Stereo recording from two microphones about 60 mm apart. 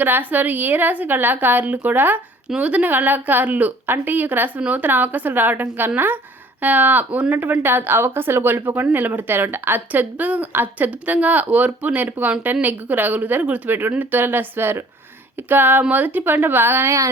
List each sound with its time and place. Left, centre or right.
0.0 s speech: right